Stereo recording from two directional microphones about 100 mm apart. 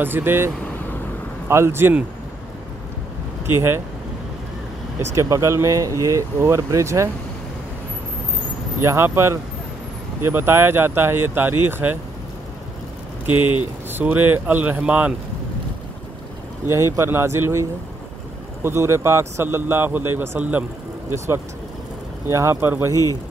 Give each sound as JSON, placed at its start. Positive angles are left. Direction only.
{"t": 0.0, "sound": "a man's voice", "side_deg": -20}
{"t": 1.5, "sound": "a man's voice", "side_deg": -25}
{"t": 3.4, "sound": "a man's voice", "side_deg": -25}
{"t": 5.1, "sound": "speech", "side_deg": -30}
{"t": 8.8, "sound": "a man's voice", "side_deg": -25}
{"t": 13.3, "sound": "speech", "side_deg": -20}
{"t": 16.6, "sound": "a man's voice", "side_deg": -30}
{"t": 22.3, "sound": "a man's voice", "side_deg": -30}